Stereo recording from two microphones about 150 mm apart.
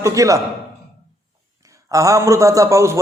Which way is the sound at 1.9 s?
20° right (ahead or behind).